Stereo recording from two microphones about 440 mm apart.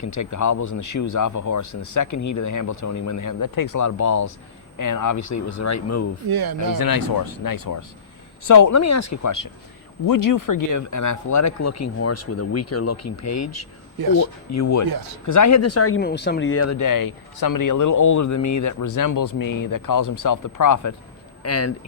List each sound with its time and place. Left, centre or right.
0.0 s speech: left
6.2 s speech: right
6.7 s speech: left